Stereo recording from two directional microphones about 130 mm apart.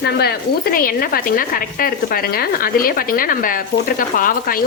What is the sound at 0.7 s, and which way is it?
Speech, 90° left.